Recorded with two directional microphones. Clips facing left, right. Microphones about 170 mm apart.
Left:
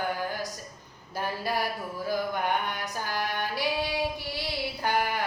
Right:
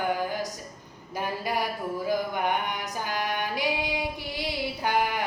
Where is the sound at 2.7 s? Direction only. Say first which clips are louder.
Right 1 dB; 15° right (ahead or behind).